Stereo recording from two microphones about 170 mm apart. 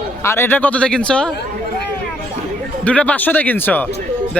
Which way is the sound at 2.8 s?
10° left (ahead or behind).